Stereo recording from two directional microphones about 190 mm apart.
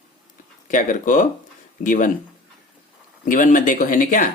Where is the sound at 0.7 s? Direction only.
40° left (ahead or behind).